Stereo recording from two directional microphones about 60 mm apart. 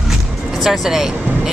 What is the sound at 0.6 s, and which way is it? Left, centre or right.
Speech, centre.